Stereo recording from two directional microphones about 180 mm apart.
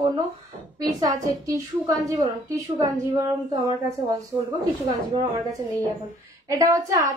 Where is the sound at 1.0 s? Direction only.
20° right (ahead or behind).